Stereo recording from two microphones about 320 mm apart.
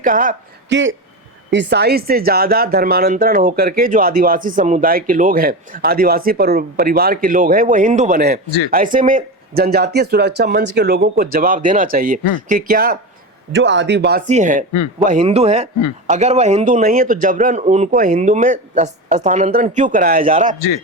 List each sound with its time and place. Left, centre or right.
0.0 s a man's voice: right